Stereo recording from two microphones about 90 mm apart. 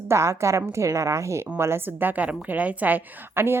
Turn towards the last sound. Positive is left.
turn(degrees=-20)  # may be behind; listen again after turning